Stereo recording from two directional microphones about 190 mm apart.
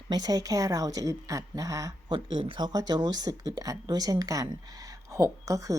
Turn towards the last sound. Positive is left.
turn(degrees=-15)  # may be behind; listen again after turning